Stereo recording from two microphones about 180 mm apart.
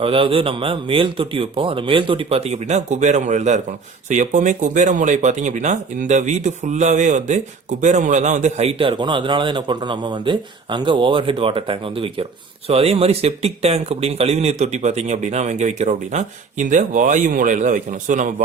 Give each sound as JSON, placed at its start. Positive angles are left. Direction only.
{"t": 0.0, "sound": "speech", "side_deg": -30}